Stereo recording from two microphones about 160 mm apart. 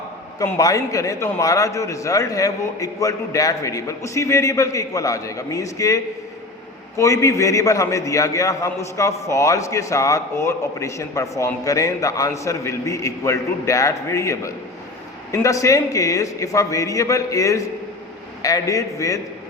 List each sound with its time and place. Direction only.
0.3 s a man's voice: 20° left (ahead or behind)